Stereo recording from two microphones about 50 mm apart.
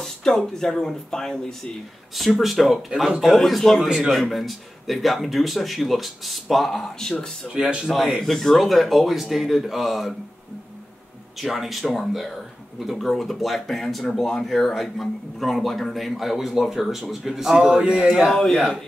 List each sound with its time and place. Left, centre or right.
0.0 s speech: centre
2.1 s speech: centre
3.8 s speech: centre
4.1 s speech: centre
7.4 s speech: centre
8.2 s speech: centre
11.3 s speech: centre
17.6 s speech: centre
18.3 s speech: centre